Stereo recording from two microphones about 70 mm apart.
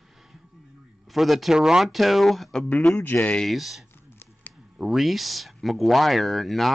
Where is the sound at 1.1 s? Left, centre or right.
Centre.